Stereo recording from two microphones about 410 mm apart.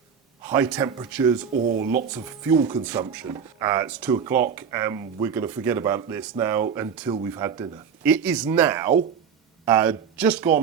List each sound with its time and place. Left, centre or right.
0.4 s speech: centre
1.7 s speech: right
2.5 s speech: centre